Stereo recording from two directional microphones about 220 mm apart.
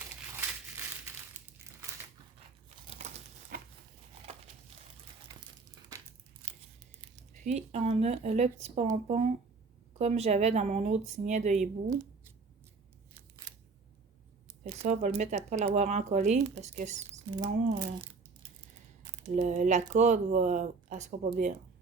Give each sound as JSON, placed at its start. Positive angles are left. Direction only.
{"t": 2.6, "sound": "crumpling", "side_deg": -30}
{"t": 3.5, "sound": "a sound", "side_deg": -45}
{"t": 7.3, "sound": "speech", "side_deg": -30}
{"t": 14.6, "sound": "speech", "side_deg": -35}